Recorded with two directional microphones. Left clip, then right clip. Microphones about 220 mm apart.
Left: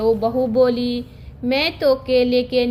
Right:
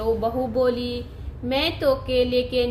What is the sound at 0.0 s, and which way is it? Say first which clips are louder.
A woman's voice: left 5 dB; 25° left (ahead or behind).